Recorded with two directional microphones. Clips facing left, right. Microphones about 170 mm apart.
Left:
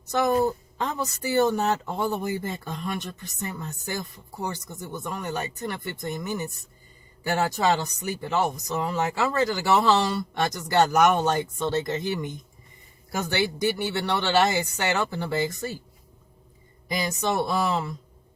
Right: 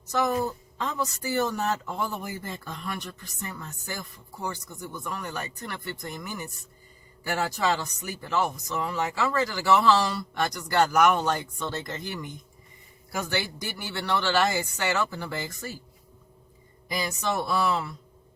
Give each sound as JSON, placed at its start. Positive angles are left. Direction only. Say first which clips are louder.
{"t": 0.8, "sound": "speech", "louder": "right 1 dB", "side_deg": 25}
{"t": 5.0, "sound": "speech", "louder": "left 4 dB", "side_deg": 20}
{"t": 16.9, "sound": "speech", "louder": "left 3 dB", "side_deg": 20}